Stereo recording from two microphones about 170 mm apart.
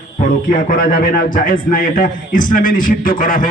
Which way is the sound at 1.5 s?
55° left (ahead or behind).